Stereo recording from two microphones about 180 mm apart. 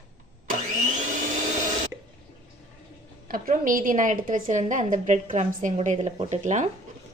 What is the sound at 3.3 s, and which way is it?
A woman's voice, 50° right (ahead or behind).